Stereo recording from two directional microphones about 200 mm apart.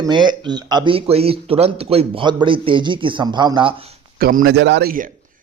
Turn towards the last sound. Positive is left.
turn(degrees=-45)  # may be behind; listen again after turning